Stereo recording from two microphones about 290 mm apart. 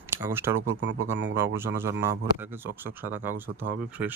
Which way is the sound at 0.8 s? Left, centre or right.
Right.